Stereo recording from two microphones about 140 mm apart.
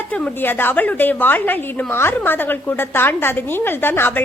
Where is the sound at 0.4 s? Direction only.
15° left (ahead or behind).